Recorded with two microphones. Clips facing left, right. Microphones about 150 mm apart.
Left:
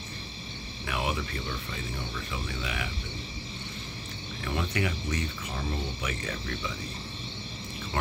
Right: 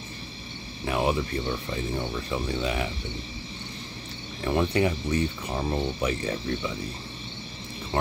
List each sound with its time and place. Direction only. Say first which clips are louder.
0.8 s cricket: right 7 dB; 30° right (ahead or behind)
2.3 s speech: right 9 dB; 35° right (ahead or behind)
4.5 s speech: right 7 dB; 30° right (ahead or behind)